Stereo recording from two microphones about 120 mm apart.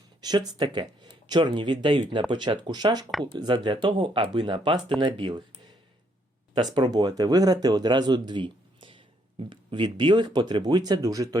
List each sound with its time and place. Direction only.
0.2 s speech: 35° right (ahead or behind)
6.7 s speech: 35° right (ahead or behind)